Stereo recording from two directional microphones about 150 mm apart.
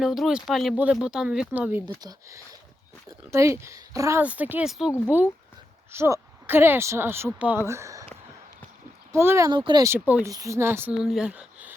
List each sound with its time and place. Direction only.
0.0 s speech: centre (ahead or behind)
2.0 s speech: 25° right (ahead or behind)
4.2 s speech: 10° right (ahead or behind)
9.1 s speech: 15° right (ahead or behind)
9.5 s speech: 30° right (ahead or behind)
9.8 s speech: 15° right (ahead or behind)
10.9 s speech: 5° right (ahead or behind)